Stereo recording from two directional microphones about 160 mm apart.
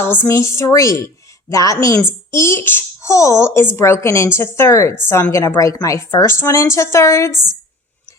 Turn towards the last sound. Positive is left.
turn(degrees=20)  # may be behind; listen again after turning